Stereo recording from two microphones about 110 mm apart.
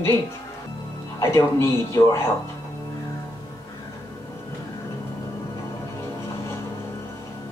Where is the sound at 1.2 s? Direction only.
25° left (ahead or behind).